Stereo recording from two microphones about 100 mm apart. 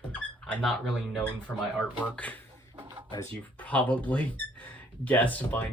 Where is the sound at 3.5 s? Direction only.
15° left (ahead or behind).